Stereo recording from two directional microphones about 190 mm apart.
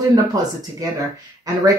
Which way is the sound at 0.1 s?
20° right (ahead or behind).